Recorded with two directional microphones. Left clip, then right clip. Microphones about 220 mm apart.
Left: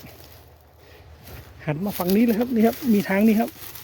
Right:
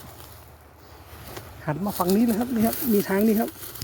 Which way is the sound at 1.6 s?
30° left (ahead or behind).